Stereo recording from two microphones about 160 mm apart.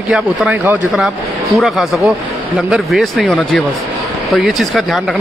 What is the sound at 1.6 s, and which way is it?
Speech, centre (ahead or behind).